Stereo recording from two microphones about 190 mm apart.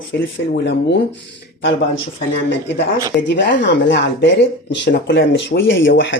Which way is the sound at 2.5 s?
65° left (ahead or behind).